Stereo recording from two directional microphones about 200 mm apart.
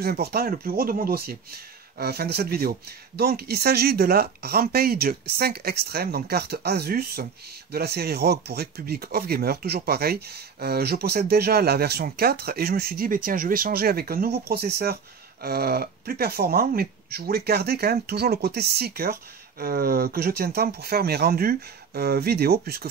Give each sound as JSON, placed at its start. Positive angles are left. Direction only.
{"t": 0.0, "sound": "speech", "side_deg": -50}